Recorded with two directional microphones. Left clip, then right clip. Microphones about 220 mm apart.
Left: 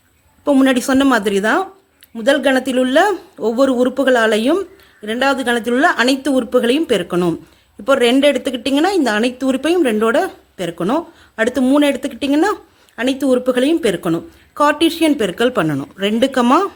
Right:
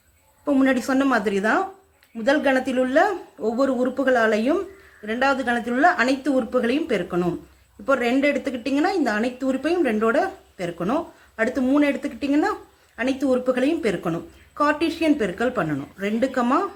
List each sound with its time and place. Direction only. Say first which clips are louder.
0.4 s speech: left 7 dB; 50° left (ahead or behind)